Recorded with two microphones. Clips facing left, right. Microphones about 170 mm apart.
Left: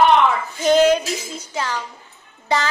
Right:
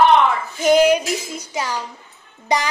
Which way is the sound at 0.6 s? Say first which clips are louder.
Right 1 dB; 10° right (ahead or behind).